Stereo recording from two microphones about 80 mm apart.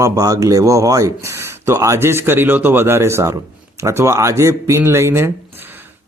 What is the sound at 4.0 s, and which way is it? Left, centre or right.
Speech, right.